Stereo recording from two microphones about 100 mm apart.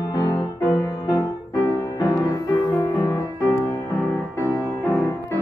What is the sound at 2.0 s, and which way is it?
Music, 40° left (ahead or behind).